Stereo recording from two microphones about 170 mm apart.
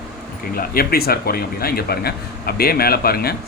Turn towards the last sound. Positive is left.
turn(degrees=65)  # may be behind; listen again after turning